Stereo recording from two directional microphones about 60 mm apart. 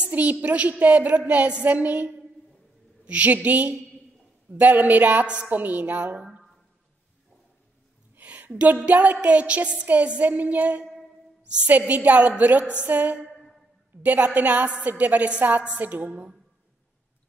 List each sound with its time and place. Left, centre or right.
0.0 s a woman's voice: right
8.2 s a woman's voice: right
13.3 s a sound: centre
14.0 s a woman's voice: right
16.1 s speech: centre